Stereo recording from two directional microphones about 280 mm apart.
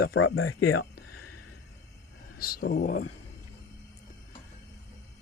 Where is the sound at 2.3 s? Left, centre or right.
Left.